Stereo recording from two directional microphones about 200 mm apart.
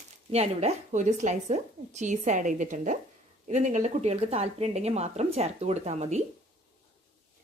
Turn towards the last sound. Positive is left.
turn(degrees=-35)  # may be behind; listen again after turning